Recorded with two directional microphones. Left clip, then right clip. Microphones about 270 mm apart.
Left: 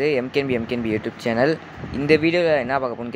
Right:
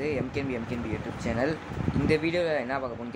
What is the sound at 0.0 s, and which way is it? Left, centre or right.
Speech, left.